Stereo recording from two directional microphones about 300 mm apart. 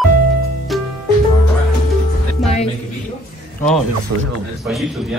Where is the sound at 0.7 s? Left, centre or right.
Centre.